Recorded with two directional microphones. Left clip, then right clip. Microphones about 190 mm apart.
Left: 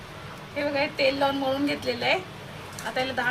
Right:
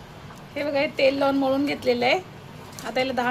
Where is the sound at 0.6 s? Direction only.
50° right (ahead or behind).